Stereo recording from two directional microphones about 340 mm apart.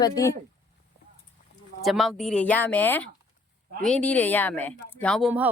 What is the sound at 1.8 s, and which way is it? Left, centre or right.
Speech, centre.